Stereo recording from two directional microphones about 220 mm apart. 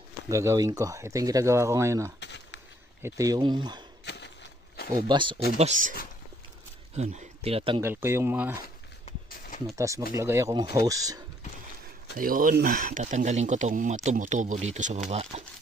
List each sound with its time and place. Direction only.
0.3 s speech: 15° right (ahead or behind)
2.1 s a sound: 50° left (ahead or behind)
3.0 s speech: 15° right (ahead or behind)
4.0 s a sound: 50° left (ahead or behind)
5.0 s speech: 20° right (ahead or behind)
5.6 s speech: 30° right (ahead or behind)
7.0 s speech: 30° right (ahead or behind)
7.8 s speech: 10° right (ahead or behind)
9.8 s speech: 15° right (ahead or behind)
12.2 s speech: 40° right (ahead or behind)